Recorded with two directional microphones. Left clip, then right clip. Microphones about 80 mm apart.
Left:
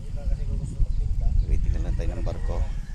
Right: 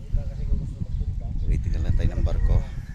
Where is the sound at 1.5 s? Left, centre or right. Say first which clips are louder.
Right 3 dB; centre.